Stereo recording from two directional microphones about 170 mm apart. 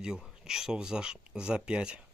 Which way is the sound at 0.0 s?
5° right (ahead or behind).